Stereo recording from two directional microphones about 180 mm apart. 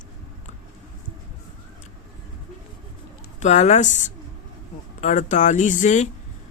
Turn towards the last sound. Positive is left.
turn(degrees=40)  # may be behind; listen again after turning